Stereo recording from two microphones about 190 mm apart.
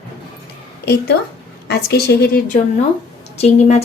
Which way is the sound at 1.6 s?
55° left (ahead or behind).